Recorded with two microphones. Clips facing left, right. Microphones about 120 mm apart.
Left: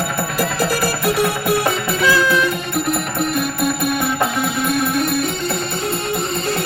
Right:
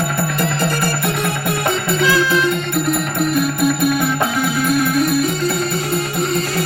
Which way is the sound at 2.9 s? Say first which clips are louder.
Right 3 dB; centre (ahead or behind).